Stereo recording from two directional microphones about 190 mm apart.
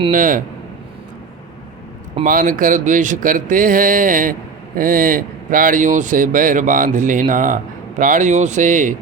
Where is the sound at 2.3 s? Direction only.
45° right (ahead or behind).